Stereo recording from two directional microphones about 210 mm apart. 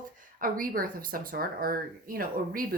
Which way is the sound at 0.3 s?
40° right (ahead or behind).